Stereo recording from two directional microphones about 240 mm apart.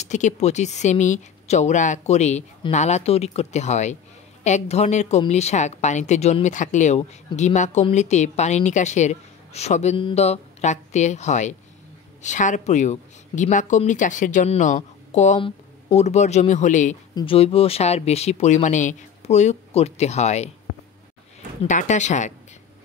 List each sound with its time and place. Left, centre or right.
0.0 s a woman's voice: left
21.6 s a woman's voice: left